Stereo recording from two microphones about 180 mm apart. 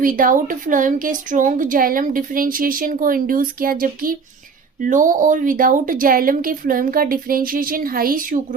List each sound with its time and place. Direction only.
0.0 s speech: 50° right (ahead or behind)